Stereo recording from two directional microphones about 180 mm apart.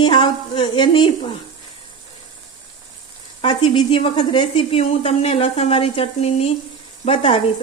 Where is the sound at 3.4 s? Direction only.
30° left (ahead or behind).